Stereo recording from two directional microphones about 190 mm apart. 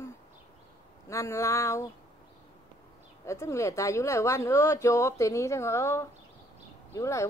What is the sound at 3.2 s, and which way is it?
Speech, 15° left (ahead or behind).